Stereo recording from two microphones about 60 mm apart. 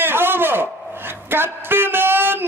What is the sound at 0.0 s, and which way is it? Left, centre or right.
A man's voice, right.